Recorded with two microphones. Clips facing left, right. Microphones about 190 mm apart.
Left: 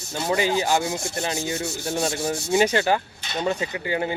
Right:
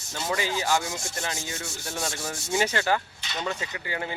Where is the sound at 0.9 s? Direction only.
60° left (ahead or behind).